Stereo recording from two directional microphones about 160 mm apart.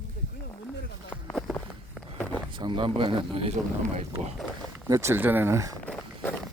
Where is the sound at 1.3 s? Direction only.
5° left (ahead or behind).